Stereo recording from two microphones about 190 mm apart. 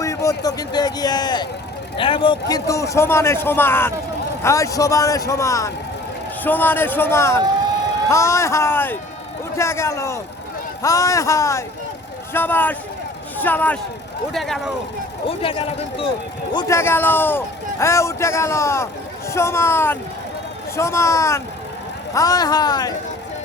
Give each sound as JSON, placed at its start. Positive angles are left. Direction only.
{"t": 0.0, "sound": "a man's voice", "side_deg": 15}
{"t": 15.3, "sound": "speech", "side_deg": 30}